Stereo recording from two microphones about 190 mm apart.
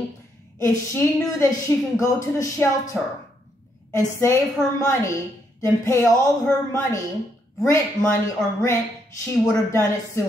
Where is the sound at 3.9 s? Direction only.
15° left (ahead or behind).